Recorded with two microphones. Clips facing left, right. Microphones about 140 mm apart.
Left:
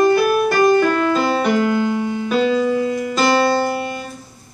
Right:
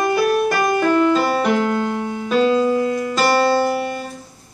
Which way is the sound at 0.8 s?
5° right (ahead or behind).